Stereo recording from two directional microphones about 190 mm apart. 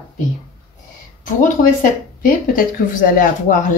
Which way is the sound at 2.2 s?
45° left (ahead or behind).